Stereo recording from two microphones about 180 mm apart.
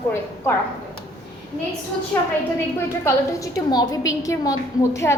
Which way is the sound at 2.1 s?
10° left (ahead or behind).